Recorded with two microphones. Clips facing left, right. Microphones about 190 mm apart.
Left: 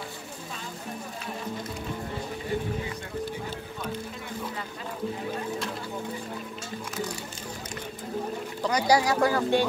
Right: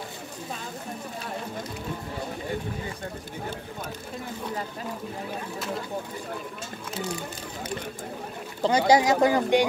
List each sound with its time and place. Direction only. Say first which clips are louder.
8.6 s speech: right 3 dB; 25° right (ahead or behind)